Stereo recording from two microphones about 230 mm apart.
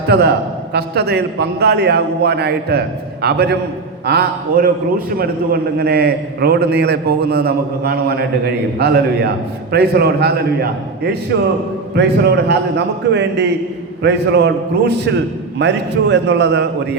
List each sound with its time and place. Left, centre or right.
0.1 s a man's voice: right